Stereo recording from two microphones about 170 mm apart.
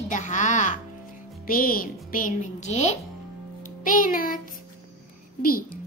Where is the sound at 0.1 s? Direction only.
45° left (ahead or behind).